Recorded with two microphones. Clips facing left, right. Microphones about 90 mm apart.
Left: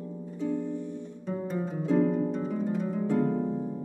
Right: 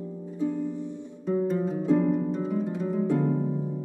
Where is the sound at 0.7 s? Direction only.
20° right (ahead or behind).